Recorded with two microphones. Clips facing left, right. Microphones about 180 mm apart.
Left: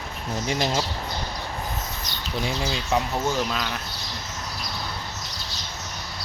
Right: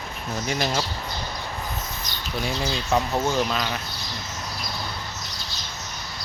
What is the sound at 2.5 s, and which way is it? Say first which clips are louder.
Speech: right 2 dB; 15° left (ahead or behind).